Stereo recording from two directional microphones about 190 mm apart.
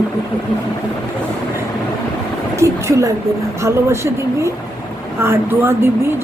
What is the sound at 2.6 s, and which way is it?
A woman's voice, 15° right (ahead or behind).